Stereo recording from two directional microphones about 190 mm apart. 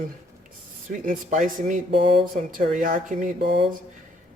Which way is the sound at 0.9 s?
45° right (ahead or behind).